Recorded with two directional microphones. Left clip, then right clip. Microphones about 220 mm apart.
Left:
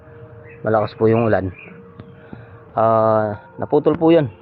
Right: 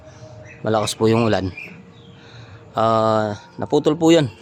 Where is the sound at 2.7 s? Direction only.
25° right (ahead or behind).